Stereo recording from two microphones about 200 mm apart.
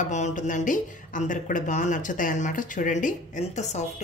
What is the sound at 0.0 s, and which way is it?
Speech, 35° left (ahead or behind).